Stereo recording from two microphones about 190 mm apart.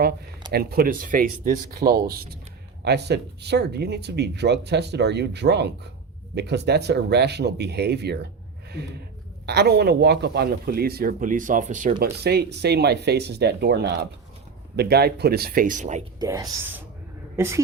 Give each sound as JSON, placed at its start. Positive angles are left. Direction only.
{"t": 0.5, "sound": "speech", "side_deg": -55}
{"t": 12.2, "sound": "speech", "side_deg": -60}
{"t": 16.2, "sound": "a woman's voice", "side_deg": -20}